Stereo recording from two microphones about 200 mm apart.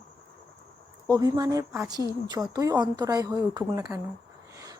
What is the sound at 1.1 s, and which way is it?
Speech, 20° right (ahead or behind).